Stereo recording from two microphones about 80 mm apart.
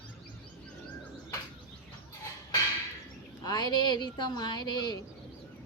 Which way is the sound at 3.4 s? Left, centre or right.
Left.